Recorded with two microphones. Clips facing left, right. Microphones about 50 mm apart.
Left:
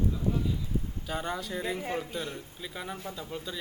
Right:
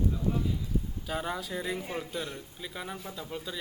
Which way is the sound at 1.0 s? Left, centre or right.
Centre.